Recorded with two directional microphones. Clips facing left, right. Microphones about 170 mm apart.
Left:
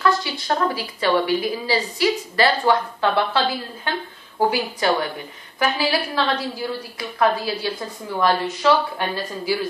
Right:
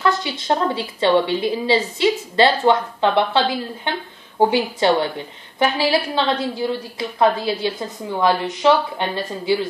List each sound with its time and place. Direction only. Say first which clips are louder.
0.0 s a woman's voice: even; 20° right (ahead or behind)